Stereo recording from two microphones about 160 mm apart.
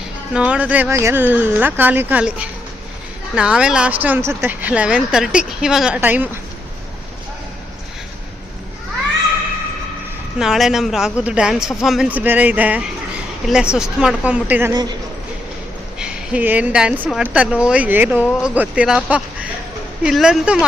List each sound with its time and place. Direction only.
0.3 s speech: 10° right (ahead or behind)
10.3 s speech: centre (ahead or behind)
14.7 s a man's voice: 25° right (ahead or behind)
16.0 s speech: 5° right (ahead or behind)